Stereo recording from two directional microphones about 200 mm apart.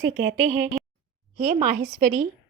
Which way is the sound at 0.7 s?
Centre (ahead or behind).